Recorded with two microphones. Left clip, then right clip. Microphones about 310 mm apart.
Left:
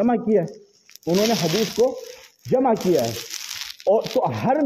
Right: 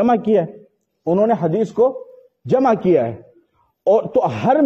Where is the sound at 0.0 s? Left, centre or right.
Right.